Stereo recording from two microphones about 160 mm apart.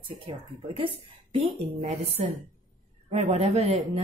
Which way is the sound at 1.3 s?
40° right (ahead or behind).